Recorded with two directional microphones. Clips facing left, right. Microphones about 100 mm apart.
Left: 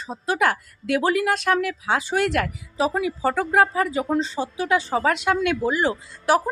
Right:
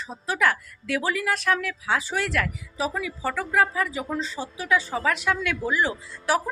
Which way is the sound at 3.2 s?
40° left (ahead or behind).